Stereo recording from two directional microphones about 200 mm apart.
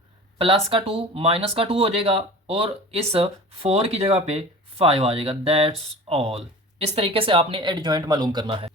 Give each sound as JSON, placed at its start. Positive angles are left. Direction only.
{"t": 0.3, "sound": "speech", "side_deg": -30}